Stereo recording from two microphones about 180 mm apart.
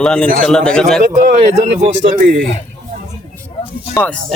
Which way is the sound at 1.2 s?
45° right (ahead or behind).